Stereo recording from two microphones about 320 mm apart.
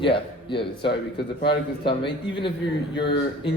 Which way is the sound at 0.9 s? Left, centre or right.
Left.